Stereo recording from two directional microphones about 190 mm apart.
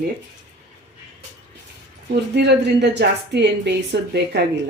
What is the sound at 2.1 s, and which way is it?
A woman's voice, 60° right (ahead or behind).